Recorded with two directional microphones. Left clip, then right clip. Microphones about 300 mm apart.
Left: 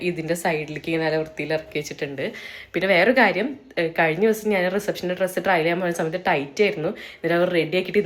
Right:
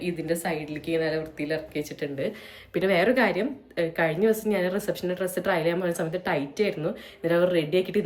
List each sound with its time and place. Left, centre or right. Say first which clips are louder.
0.0 s speech: left 5 dB; centre
2.7 s a woman's voice: left 5 dB; centre